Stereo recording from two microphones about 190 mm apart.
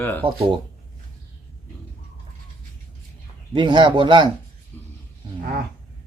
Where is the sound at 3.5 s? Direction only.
25° right (ahead or behind).